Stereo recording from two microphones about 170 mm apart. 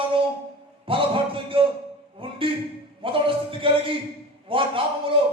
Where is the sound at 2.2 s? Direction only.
30° right (ahead or behind).